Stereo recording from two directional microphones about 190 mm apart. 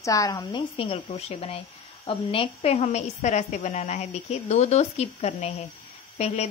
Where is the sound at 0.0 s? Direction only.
15° left (ahead or behind).